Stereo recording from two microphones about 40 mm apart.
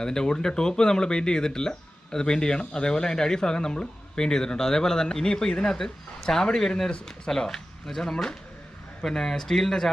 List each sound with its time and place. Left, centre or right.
0.0 s speech: centre